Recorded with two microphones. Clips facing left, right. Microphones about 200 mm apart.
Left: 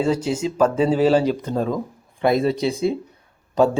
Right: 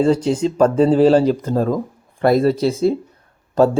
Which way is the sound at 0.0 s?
5° left (ahead or behind).